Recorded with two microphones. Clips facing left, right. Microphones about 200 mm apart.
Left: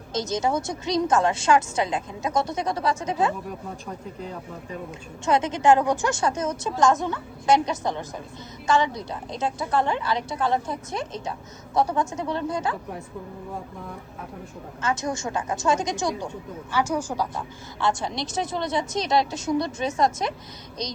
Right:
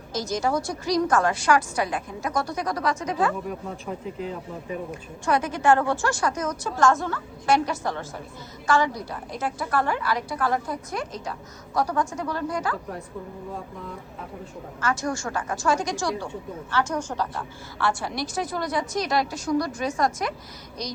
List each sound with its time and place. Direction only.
0.1 s a woman's voice: 20° left (ahead or behind)
4.9 s a woman's voice: 20° left (ahead or behind)
14.8 s a woman's voice: 20° left (ahead or behind)
16.7 s a woman's voice: 10° left (ahead or behind)